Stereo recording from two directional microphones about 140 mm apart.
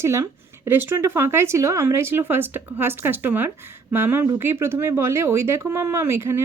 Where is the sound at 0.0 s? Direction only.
20° right (ahead or behind).